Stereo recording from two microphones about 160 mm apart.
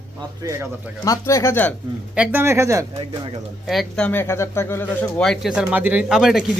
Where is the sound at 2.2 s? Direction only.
15° right (ahead or behind).